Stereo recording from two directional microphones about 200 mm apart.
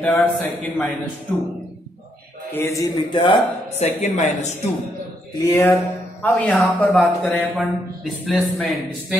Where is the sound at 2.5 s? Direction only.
15° left (ahead or behind).